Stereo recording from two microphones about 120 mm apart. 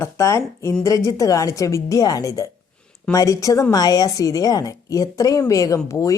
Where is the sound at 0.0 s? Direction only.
25° left (ahead or behind).